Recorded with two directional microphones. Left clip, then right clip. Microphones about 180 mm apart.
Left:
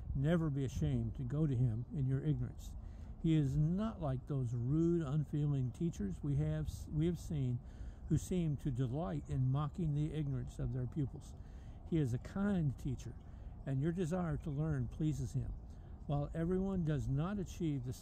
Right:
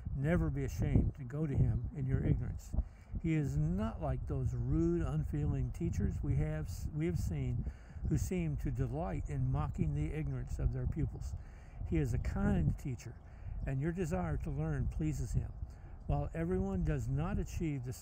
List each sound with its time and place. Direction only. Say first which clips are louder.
0.2 s speech: right 1 dB; 20° right (ahead or behind)